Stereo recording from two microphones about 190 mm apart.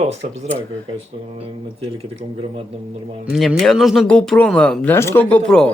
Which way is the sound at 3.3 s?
Centre (ahead or behind).